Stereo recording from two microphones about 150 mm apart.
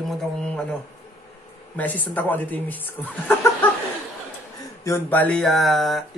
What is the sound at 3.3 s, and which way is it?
Chicken, 15° left (ahead or behind).